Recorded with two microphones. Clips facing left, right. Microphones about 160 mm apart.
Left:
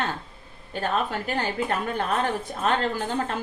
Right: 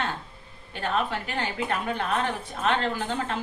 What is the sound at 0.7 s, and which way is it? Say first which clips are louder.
A woman's voice: left 1 dB; 40° left (ahead or behind).